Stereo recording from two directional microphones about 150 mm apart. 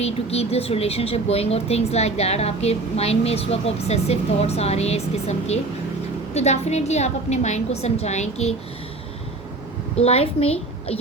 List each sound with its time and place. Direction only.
0.0 s a woman's voice: 45° left (ahead or behind)
10.0 s a woman's voice: 45° left (ahead or behind)